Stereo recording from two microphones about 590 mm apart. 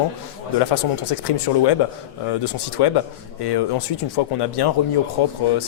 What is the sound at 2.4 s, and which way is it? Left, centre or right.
Speech, left.